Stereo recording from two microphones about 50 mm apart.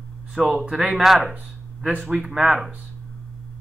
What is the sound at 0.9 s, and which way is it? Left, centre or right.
Speech, centre.